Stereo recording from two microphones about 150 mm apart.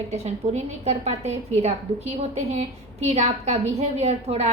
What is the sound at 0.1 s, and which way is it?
A woman's voice, 45° right (ahead or behind).